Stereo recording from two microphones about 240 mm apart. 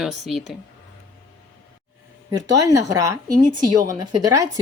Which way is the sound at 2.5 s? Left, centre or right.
Centre.